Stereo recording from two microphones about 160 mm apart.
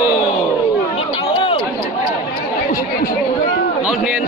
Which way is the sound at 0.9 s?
35° left (ahead or behind).